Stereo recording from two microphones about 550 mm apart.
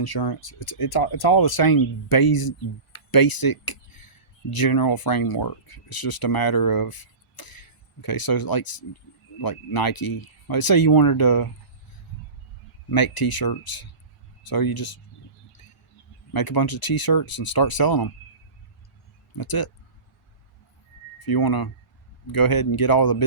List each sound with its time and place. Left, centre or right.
0.0 s speech: left
12.9 s speech: left
16.3 s speech: left
19.3 s speech: left
21.2 s speech: left